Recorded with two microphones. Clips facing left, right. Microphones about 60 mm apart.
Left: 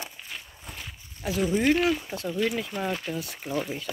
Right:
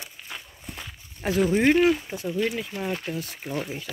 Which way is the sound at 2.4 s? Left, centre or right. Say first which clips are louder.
Even; centre.